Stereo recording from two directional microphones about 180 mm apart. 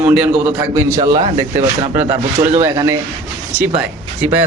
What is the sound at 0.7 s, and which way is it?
Speech, 15° right (ahead or behind).